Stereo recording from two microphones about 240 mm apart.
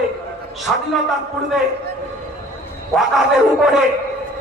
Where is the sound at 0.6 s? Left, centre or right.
Centre.